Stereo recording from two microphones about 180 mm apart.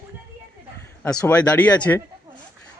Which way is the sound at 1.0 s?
5° left (ahead or behind).